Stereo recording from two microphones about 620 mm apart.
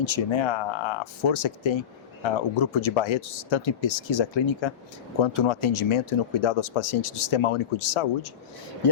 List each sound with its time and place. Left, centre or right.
0.0 s speech: left